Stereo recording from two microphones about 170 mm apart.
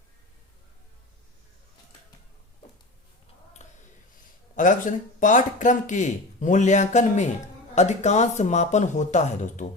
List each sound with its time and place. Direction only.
4.5 s speech: 50° left (ahead or behind)